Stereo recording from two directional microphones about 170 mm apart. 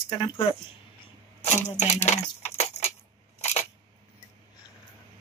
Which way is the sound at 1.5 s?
40° left (ahead or behind).